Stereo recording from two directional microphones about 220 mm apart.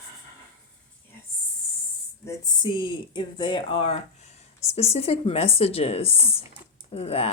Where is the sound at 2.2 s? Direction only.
20° left (ahead or behind).